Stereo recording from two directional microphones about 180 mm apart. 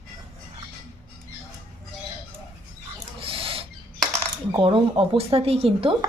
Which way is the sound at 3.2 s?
30° right (ahead or behind).